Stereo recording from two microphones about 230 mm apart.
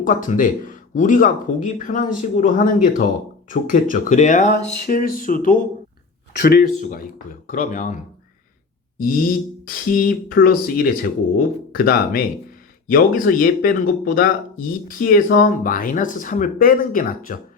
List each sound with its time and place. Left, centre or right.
0.0 s speech: left
9.0 s a sound: left
9.6 s speech: left